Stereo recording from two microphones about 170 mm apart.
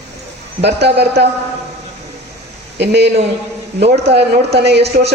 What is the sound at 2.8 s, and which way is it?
Speech, 80° right.